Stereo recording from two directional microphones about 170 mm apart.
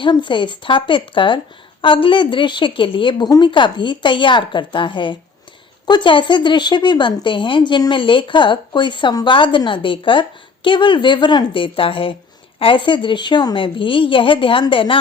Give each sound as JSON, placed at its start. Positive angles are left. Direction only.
{"t": 0.0, "sound": "a woman's voice", "side_deg": 30}